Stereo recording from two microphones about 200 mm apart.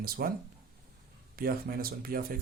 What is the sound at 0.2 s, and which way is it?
Speech, 45° right (ahead or behind).